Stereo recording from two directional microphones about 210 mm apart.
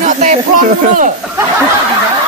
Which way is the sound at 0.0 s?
35° right (ahead or behind).